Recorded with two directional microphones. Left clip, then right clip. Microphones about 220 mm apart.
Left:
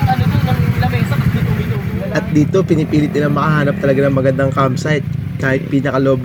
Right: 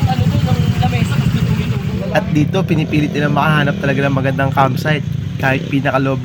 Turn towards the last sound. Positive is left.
turn(degrees=5)  # may be behind; listen again after turning